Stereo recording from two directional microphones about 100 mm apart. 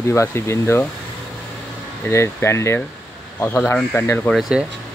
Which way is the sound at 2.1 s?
25° left (ahead or behind).